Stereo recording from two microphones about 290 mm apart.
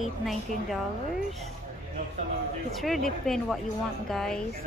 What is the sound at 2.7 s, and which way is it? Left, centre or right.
Speech, centre.